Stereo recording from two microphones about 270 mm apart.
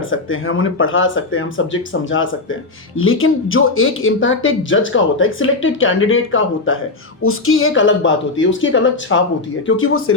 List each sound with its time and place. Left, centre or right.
0.1 s speech: left